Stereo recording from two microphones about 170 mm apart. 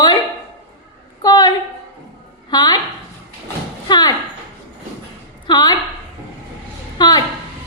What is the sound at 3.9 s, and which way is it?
Speech, 25° left (ahead or behind).